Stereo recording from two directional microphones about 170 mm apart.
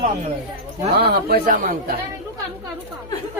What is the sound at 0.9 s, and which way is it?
Speech, 70° right (ahead or behind).